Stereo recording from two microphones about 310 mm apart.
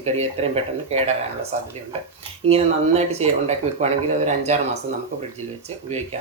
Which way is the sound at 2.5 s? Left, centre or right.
Centre.